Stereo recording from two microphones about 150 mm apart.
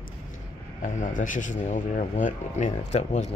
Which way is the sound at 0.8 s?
60° left (ahead or behind).